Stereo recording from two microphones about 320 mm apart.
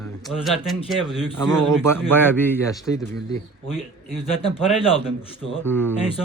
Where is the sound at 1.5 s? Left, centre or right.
Right.